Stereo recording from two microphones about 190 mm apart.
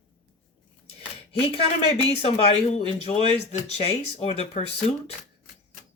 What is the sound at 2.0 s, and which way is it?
Speech, 30° left (ahead or behind).